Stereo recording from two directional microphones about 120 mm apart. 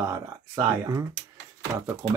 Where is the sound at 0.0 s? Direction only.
25° right (ahead or behind).